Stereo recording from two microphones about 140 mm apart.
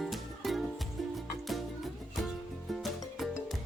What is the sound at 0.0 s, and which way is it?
Music, centre (ahead or behind).